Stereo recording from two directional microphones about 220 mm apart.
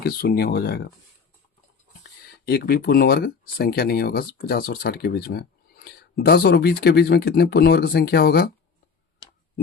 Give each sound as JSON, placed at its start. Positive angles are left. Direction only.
{"t": 0.0, "sound": "speech", "side_deg": 45}
{"t": 2.0, "sound": "speech", "side_deg": 45}